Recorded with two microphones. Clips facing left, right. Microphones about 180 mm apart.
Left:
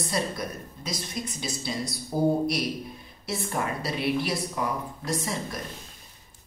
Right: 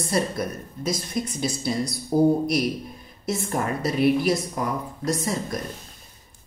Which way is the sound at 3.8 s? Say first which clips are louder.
Right 10 dB; 50° right (ahead or behind).